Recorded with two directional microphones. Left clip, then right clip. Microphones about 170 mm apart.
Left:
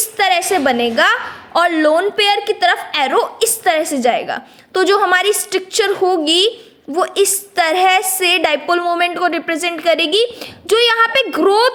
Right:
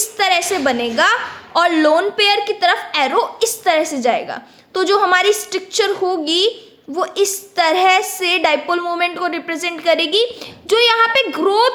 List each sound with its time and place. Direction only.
0.0 s a woman's voice: 20° left (ahead or behind)